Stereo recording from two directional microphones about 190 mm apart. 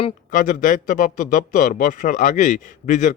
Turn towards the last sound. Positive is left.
turn(degrees=40)  # may be behind; listen again after turning